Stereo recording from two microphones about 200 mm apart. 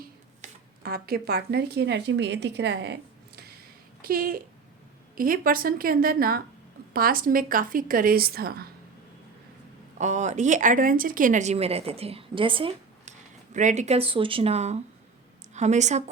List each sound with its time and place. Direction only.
0.4 s a sound: 35° right (ahead or behind)
0.8 s a woman's voice: 50° right (ahead or behind)
10.0 s speech: 35° right (ahead or behind)